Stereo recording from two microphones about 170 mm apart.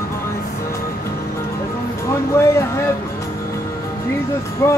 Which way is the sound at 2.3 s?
15° left (ahead or behind).